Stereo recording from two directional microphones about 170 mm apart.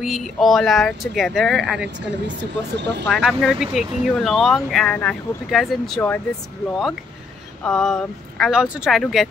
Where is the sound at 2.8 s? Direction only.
90° right.